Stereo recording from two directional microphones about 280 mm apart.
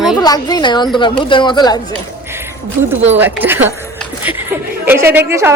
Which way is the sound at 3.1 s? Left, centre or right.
Centre.